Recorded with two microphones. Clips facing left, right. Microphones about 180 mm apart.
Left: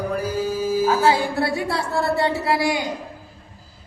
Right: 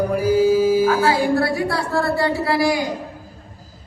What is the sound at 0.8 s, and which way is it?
Music, 25° left (ahead or behind).